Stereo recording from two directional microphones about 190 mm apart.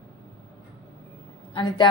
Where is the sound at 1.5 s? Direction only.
25° left (ahead or behind).